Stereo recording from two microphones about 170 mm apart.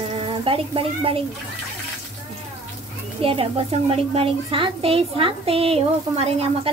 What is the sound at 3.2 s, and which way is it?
A woman's voice, 35° right (ahead or behind).